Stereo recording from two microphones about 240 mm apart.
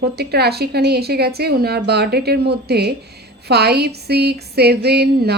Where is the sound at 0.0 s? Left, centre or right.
Right.